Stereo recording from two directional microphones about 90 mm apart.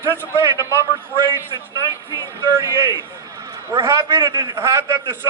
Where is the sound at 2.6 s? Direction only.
40° right (ahead or behind).